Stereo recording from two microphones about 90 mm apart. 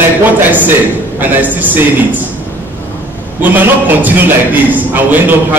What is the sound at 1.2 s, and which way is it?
Speech, 20° right (ahead or behind).